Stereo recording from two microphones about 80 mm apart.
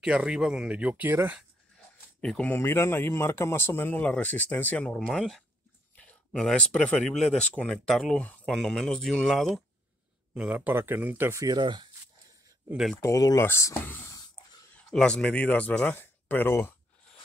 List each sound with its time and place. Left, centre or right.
0.0 s speech: centre
2.4 s speech: left
4.0 s speech: centre
4.9 s speech: centre
10.3 s speech: centre
10.7 s speech: right
11.4 s speech: right
13.0 s speech: left
14.9 s speech: centre
16.0 s speech: left